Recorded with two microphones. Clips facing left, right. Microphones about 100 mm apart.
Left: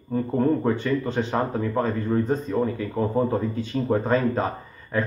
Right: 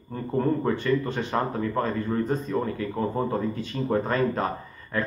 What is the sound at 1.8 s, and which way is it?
Speech, 30° left (ahead or behind).